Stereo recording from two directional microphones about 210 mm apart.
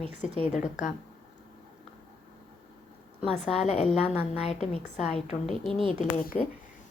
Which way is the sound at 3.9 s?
30° left (ahead or behind).